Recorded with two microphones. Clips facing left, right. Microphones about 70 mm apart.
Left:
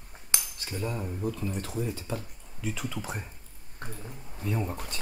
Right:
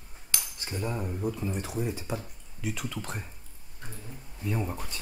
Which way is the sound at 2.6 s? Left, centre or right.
Centre.